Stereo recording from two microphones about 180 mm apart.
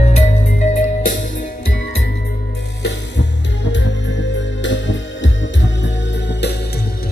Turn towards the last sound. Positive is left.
turn(degrees=70)  # may be behind; listen again after turning